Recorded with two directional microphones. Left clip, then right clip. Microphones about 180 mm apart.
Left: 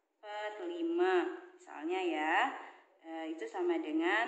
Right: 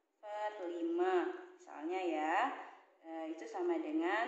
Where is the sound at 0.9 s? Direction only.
20° right (ahead or behind).